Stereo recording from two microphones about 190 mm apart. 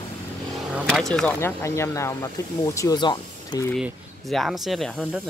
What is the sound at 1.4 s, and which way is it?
Speech, 15° left (ahead or behind).